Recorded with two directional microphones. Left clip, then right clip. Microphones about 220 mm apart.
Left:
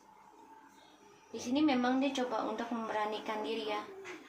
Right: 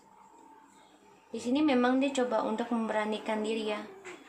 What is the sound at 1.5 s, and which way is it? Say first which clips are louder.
Speech: right 4 dB; 35° right (ahead or behind).